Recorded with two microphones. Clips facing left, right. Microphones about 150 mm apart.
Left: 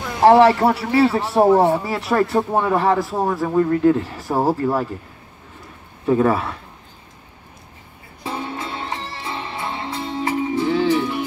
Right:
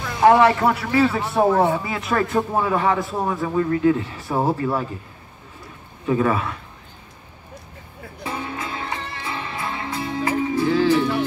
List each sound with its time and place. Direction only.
0.2 s speech: 35° left (ahead or behind)
6.0 s speech: 35° left (ahead or behind)
8.2 s music: 30° left (ahead or behind); by 11.2 s 15° left (ahead or behind)